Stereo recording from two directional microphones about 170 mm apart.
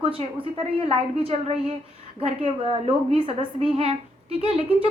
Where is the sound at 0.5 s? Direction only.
35° right (ahead or behind).